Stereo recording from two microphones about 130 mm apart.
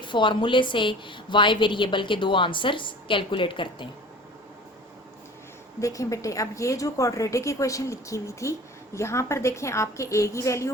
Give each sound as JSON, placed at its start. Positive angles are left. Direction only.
{"t": 0.0, "sound": "a woman's voice", "side_deg": 40}
{"t": 5.8, "sound": "a woman's voice", "side_deg": 25}